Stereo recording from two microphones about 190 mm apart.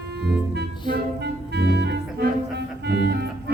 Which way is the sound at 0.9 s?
60° right (ahead or behind).